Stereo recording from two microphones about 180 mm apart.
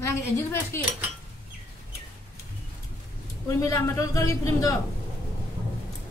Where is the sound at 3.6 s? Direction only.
15° left (ahead or behind).